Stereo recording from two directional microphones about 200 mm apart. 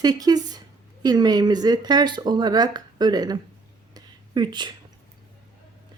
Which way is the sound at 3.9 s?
20° right (ahead or behind).